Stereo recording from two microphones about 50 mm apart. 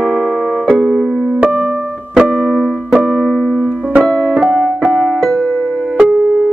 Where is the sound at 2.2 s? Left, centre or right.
Centre.